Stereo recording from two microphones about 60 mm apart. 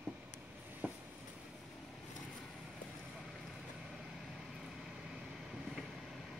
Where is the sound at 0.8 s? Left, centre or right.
Right.